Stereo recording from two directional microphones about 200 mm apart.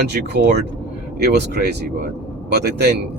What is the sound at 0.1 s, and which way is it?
Speech, 55° right (ahead or behind).